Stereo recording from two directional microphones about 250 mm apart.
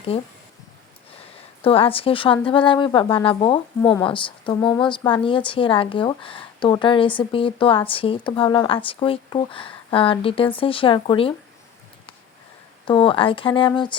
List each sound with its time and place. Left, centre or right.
0.1 s speech: left
12.8 s speech: centre